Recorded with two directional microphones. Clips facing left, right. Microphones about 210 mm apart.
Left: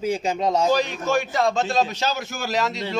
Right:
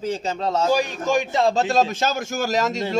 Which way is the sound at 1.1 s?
20° right (ahead or behind).